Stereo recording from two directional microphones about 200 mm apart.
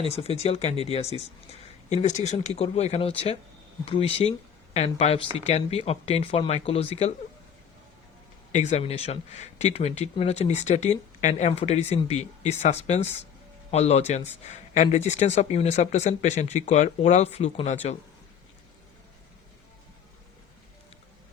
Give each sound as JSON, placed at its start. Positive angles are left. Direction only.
{"t": 0.0, "sound": "speech", "side_deg": 30}
{"t": 8.5, "sound": "speech", "side_deg": 35}